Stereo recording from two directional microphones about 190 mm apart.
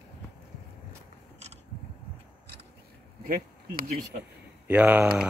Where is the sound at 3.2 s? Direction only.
50° right (ahead or behind).